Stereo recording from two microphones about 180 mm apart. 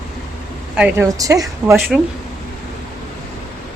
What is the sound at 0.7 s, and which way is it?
Speech, 10° right (ahead or behind).